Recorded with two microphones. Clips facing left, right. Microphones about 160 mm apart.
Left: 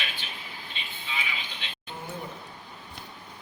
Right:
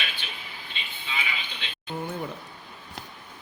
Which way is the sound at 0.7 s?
75° right (ahead or behind).